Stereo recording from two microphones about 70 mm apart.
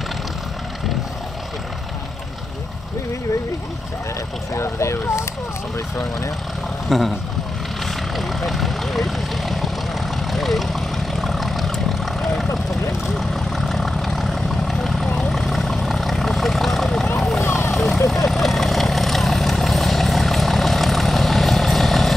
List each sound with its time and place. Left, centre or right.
4.6 s speech: left
6.9 s speech: centre
7.8 s vehicle: centre
17.4 s vehicle: left
17.6 s vehicle: centre